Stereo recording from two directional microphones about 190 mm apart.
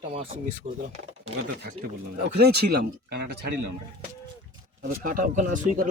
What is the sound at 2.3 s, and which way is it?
Speech, 55° right (ahead or behind).